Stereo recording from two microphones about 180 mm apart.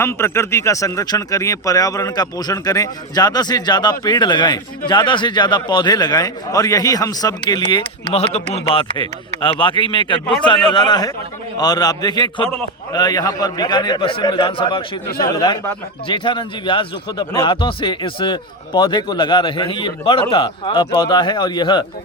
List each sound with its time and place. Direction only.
0.0 s speech: 15° left (ahead or behind)